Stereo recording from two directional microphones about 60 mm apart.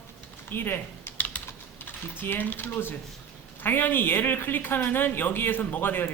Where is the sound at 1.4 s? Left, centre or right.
Left.